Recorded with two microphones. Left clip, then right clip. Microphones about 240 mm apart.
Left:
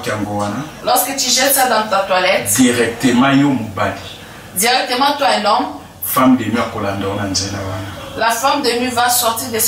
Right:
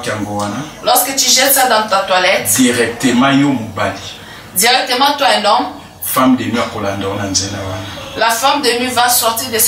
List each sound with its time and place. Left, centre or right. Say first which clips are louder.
0.8 s a woman's voice: right 3 dB; centre